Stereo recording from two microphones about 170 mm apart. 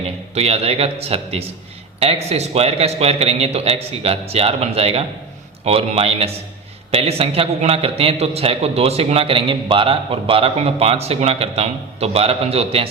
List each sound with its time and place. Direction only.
0.3 s a man's voice: 35° right (ahead or behind)